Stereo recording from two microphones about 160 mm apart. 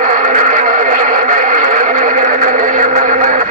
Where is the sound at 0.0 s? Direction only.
55° right (ahead or behind).